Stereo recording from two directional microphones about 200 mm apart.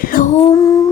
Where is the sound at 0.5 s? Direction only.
15° left (ahead or behind).